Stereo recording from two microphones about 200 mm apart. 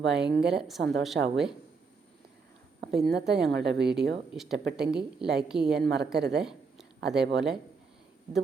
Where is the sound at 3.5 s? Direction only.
60° right (ahead or behind).